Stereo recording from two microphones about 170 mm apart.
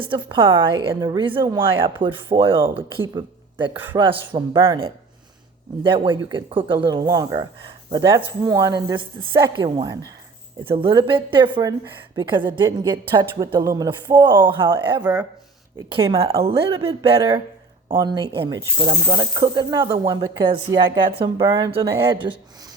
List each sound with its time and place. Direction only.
0.0 s a woman's voice: 30° right (ahead or behind)
15.0 s speech: 10° right (ahead or behind)
15.9 s a woman's voice: 30° right (ahead or behind)